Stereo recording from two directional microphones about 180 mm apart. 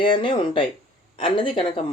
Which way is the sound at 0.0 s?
30° left (ahead or behind).